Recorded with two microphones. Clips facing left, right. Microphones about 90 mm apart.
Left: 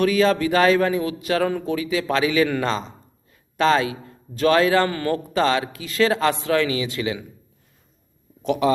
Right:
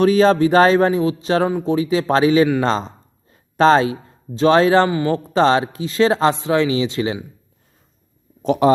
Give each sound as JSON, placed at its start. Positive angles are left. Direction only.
{"t": 0.0, "sound": "speech", "side_deg": -35}
{"t": 2.6, "sound": "a sound", "side_deg": -35}
{"t": 4.4, "sound": "speech", "side_deg": -30}
{"t": 4.9, "sound": "speech", "side_deg": -20}
{"t": 8.4, "sound": "speech", "side_deg": -35}